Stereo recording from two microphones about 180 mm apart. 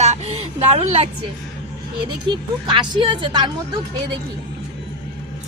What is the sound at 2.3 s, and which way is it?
Speech, 25° right (ahead or behind).